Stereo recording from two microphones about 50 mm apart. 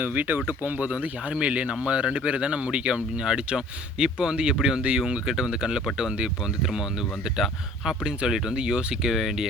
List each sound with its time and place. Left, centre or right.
0.0 s speech: right; by 9.5 s centre